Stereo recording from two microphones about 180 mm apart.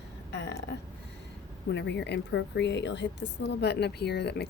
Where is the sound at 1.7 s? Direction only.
70° left (ahead or behind).